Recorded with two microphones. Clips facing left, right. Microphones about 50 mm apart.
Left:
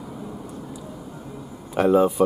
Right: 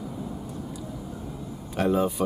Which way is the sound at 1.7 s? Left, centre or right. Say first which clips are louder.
Left 6 dB; centre.